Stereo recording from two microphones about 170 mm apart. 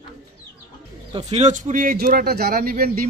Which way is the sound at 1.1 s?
40° right (ahead or behind).